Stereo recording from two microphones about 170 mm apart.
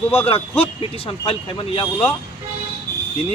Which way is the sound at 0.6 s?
35° left (ahead or behind).